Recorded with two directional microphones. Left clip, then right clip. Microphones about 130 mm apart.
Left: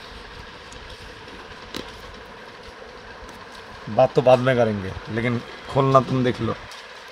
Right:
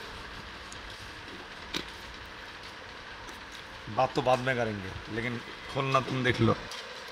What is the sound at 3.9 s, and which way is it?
Speech, 45° left (ahead or behind).